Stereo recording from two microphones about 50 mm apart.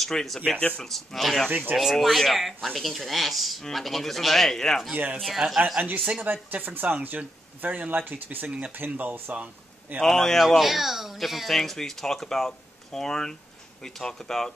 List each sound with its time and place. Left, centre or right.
0.0 s speech: centre
4.9 s speech: right
5.2 s speech: centre
6.2 s speech: right
9.9 s speech: centre